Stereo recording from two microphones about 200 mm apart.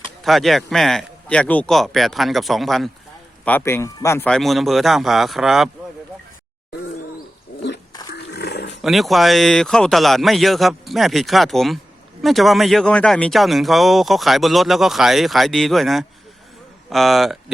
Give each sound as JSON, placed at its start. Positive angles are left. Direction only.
{"t": 0.3, "sound": "speech", "side_deg": 0}
{"t": 8.1, "sound": "dog", "side_deg": 55}
{"t": 8.8, "sound": "speech", "side_deg": 0}